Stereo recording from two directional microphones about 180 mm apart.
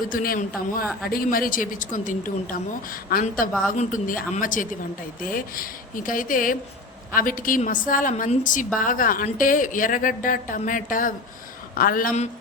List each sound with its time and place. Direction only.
0.1 s a woman's voice: 50° left (ahead or behind)